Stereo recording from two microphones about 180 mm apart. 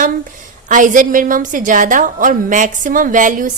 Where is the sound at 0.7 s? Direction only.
45° right (ahead or behind).